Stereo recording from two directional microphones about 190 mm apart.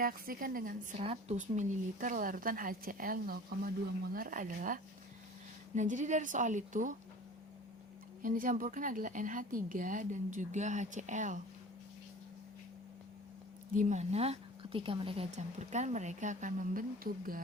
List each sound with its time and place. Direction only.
0.0 s a woman's voice: 50° right (ahead or behind)
8.2 s a woman's voice: 45° right (ahead or behind)
13.7 s a woman's voice: 40° right (ahead or behind)